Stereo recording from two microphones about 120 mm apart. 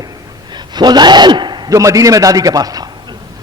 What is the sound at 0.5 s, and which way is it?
A man's voice, 35° right (ahead or behind).